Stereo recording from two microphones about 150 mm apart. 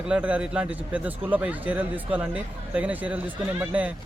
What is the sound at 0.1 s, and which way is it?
A man's voice, 10° right (ahead or behind).